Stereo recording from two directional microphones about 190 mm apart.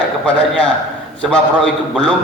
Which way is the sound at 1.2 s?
5° left (ahead or behind).